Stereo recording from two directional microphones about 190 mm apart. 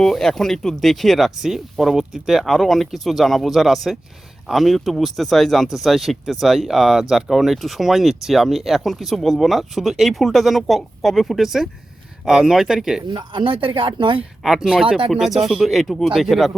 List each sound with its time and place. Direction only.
0.0 s speech: centre (ahead or behind)
13.1 s speech: 25° right (ahead or behind)
14.4 s speech: centre (ahead or behind)